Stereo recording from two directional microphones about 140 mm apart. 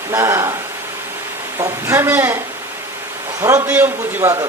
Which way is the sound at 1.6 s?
20° right (ahead or behind).